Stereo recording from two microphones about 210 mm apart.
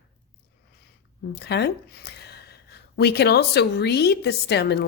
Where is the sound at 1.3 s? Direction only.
50° left (ahead or behind).